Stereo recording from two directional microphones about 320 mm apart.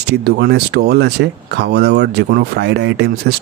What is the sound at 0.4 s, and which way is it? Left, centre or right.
Speech, right.